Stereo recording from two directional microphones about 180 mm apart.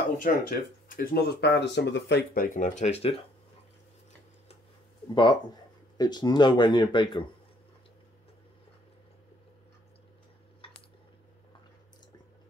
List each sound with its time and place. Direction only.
0.2 s speech: 55° left (ahead or behind); by 2.4 s 75° left (ahead or behind)
2.4 s speech: 45° left (ahead or behind)
5.1 s speech: 25° left (ahead or behind)